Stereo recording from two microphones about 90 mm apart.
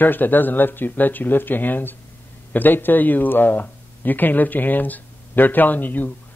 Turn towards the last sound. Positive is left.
turn(degrees=20)  # may be behind; listen again after turning